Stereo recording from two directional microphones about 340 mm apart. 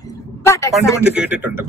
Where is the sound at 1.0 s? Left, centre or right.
Centre.